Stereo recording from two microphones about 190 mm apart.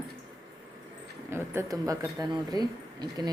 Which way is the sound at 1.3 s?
15° right (ahead or behind).